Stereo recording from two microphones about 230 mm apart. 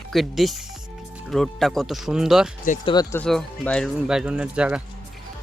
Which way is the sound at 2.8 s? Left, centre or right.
Centre.